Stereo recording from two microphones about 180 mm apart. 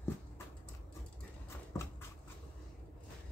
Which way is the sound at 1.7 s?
15° left (ahead or behind).